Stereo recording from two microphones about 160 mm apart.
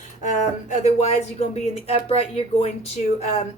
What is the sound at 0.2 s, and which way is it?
Speech, 50° left (ahead or behind).